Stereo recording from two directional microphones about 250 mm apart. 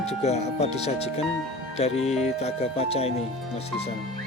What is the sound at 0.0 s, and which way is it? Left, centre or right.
Speech, left.